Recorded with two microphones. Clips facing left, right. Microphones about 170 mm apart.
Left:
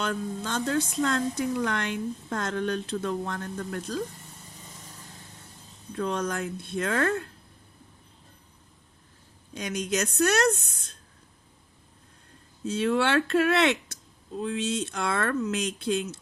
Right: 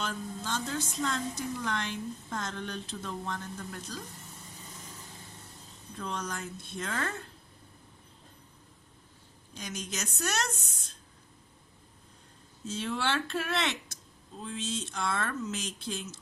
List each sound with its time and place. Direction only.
0.0 s a woman's voice: 60° left (ahead or behind)
6.0 s a woman's voice: 65° left (ahead or behind)
9.6 s a woman's voice: 65° left (ahead or behind)
12.6 s a woman's voice: 60° left (ahead or behind)